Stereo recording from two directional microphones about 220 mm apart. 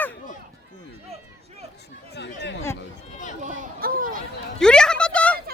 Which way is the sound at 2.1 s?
50° left (ahead or behind).